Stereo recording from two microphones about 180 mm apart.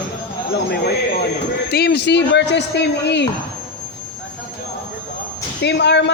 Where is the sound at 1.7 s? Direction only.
60° left (ahead or behind).